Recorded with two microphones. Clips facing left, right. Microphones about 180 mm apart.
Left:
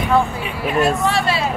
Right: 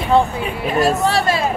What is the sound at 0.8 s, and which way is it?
Speech, 35° right (ahead or behind).